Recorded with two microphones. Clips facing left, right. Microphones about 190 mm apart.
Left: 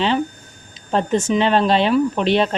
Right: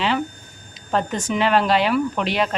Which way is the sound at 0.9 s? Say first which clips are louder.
Left 4 dB; 25° left (ahead or behind).